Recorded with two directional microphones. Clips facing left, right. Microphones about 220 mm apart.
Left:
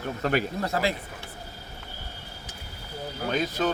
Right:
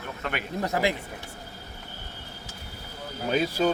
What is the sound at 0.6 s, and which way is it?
Speech, 15° right (ahead or behind).